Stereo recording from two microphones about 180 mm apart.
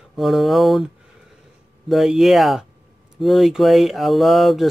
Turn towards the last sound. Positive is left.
turn(degrees=0)  # may be behind; listen again after turning